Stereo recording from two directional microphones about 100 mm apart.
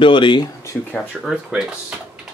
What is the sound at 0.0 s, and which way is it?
Speech, 55° left (ahead or behind).